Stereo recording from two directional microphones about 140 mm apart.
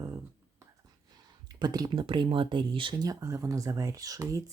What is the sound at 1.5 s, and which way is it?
Speech, 30° right (ahead or behind).